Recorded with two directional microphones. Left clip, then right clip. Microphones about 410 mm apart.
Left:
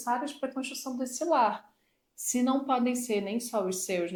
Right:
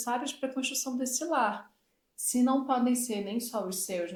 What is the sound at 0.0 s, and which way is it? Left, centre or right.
Speech, centre.